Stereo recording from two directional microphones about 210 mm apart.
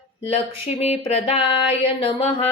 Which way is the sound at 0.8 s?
30° left (ahead or behind).